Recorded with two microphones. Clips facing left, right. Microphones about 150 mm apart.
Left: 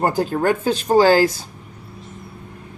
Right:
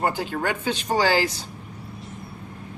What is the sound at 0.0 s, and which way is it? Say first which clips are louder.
Speech: left 6 dB; 40° left (ahead or behind).